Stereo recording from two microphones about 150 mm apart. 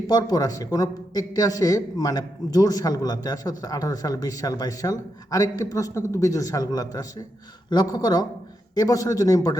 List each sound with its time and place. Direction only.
0.1 s a man's voice: 25° left (ahead or behind)